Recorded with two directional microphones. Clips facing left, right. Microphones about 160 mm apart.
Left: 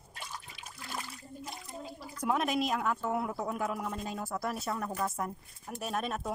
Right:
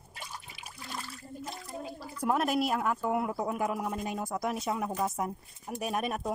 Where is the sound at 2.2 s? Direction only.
5° right (ahead or behind).